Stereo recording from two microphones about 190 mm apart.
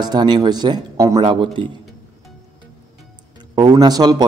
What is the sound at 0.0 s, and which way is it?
Speech, 20° right (ahead or behind).